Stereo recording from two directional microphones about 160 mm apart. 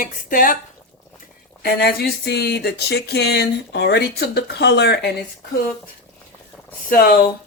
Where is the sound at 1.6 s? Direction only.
85° left.